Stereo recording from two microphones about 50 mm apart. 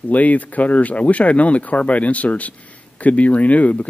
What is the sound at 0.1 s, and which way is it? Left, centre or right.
Speech, left.